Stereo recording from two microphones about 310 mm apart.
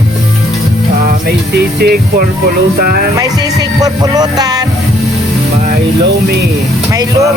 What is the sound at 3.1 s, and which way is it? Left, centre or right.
Music, centre.